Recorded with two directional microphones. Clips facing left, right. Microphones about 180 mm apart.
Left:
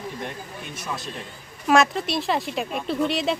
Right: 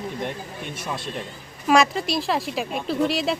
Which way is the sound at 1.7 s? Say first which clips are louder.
Even; centre (ahead or behind).